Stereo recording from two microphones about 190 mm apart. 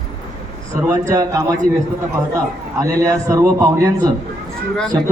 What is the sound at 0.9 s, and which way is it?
A man's voice, 15° right (ahead or behind).